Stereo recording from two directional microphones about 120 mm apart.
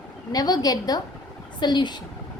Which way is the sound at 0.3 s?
35° left (ahead or behind).